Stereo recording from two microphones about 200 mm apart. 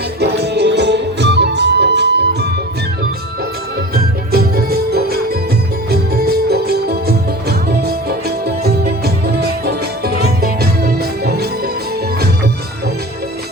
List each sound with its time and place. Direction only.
0.2 s music: 55° right (ahead or behind)
3.9 s music: 50° right (ahead or behind)